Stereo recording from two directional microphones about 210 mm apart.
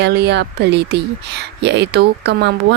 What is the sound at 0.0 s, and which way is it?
Speech, 55° right (ahead or behind).